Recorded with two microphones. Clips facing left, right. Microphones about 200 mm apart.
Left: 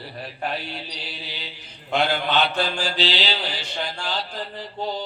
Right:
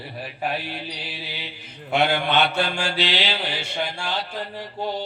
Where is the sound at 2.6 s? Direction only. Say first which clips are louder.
Even; 55° right (ahead or behind).